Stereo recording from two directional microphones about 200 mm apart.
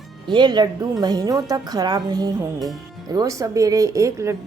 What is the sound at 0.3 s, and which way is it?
A woman's voice, 20° right (ahead or behind).